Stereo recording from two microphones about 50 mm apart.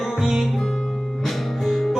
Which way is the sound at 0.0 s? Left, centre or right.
Centre.